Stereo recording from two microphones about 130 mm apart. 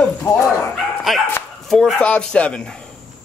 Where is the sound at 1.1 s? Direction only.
Centre (ahead or behind).